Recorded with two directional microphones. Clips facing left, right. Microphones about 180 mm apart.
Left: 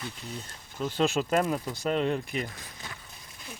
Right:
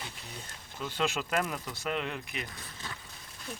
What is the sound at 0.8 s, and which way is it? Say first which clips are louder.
Speech: left 6 dB; 35° left (ahead or behind).